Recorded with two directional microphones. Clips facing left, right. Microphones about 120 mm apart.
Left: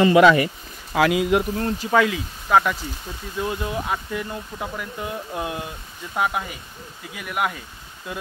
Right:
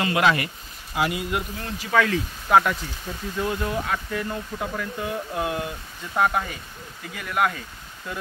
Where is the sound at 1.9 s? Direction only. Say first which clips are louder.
Left 1 dB; 15° left (ahead or behind).